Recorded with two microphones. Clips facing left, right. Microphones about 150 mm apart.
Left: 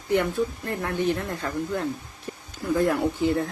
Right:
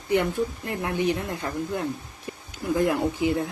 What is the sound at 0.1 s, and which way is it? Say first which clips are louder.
Speech: even; 15° right (ahead or behind).